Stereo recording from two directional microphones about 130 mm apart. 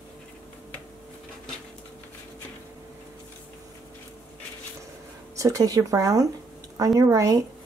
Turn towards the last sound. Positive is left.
turn(degrees=-25)  # may be behind; listen again after turning